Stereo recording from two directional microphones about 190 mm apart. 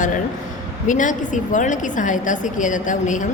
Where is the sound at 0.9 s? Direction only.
40° left (ahead or behind).